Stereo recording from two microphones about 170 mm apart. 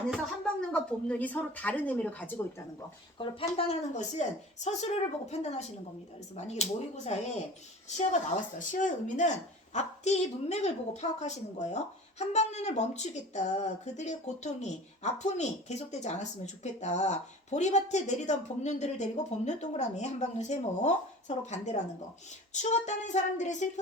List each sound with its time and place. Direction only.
0.1 s a woman's voice: 5° left (ahead or behind)
3.2 s a woman's voice: 35° left (ahead or behind)